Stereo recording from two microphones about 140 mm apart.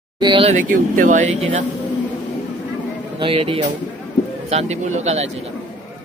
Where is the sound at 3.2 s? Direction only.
40° right (ahead or behind).